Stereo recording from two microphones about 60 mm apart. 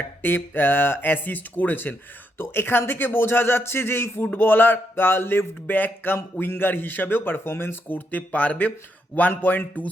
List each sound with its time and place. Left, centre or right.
0.2 s speech: left